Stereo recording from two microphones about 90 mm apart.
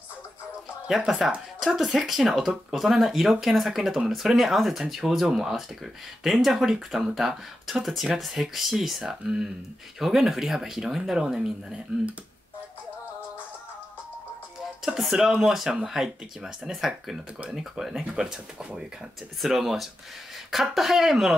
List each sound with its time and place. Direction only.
0.8 s speech: 5° right (ahead or behind)
14.6 s speech: 5° right (ahead or behind)